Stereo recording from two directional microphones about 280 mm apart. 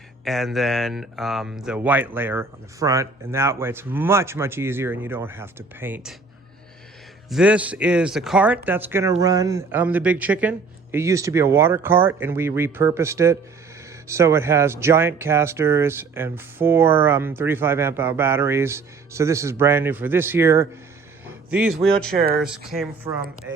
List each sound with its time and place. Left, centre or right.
0.3 s speech: centre
7.3 s speech: centre
22.1 s speech: right
22.4 s speech: centre